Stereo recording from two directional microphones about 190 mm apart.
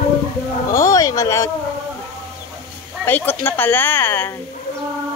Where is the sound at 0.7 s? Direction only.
15° left (ahead or behind).